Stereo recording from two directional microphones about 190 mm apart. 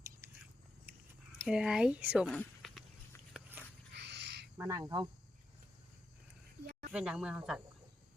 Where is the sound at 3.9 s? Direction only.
60° right (ahead or behind).